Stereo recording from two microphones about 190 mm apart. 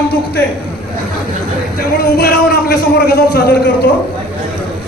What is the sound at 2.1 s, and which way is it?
Speech, 55° left (ahead or behind).